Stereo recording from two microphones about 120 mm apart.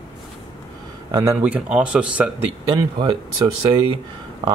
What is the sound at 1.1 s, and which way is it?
Speech, 25° right (ahead or behind).